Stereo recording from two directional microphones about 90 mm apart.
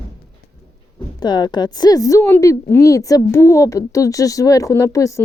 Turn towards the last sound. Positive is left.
turn(degrees=35)  # may be behind; listen again after turning